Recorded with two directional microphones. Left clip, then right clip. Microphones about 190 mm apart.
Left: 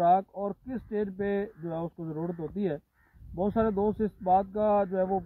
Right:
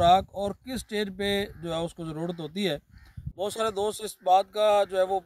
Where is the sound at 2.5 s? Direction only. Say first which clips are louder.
Right 3 dB; 40° right (ahead or behind).